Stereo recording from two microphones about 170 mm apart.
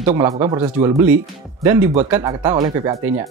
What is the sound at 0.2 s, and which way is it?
Speech, 20° right (ahead or behind).